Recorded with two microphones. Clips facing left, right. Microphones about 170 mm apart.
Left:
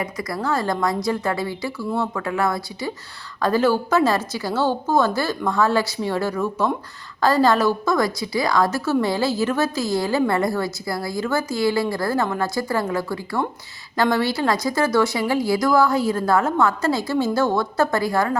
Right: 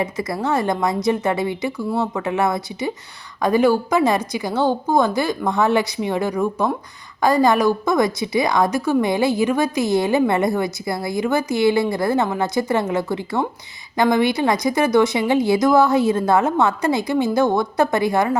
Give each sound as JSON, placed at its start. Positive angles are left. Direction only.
{"t": 0.0, "sound": "a woman's voice", "side_deg": -25}